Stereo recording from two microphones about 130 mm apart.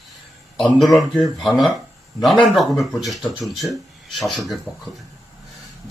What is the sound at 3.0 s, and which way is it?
Speech, centre (ahead or behind).